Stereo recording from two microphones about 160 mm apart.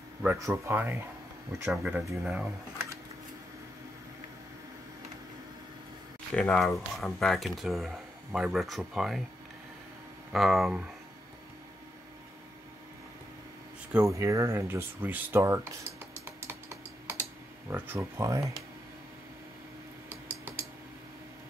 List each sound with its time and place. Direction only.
0.4 s speech: 15° right (ahead or behind)
6.3 s speech: 5° left (ahead or behind)
10.3 s speech: centre (ahead or behind)
13.9 s speech: 20° right (ahead or behind)
16.3 s computer keyboard: 15° right (ahead or behind)
20.1 s a sound: 10° right (ahead or behind)